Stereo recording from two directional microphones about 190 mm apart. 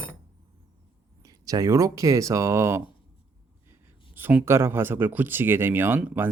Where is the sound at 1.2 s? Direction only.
20° right (ahead or behind).